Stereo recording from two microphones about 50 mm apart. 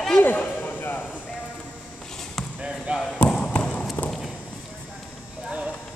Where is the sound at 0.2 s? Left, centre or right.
Left.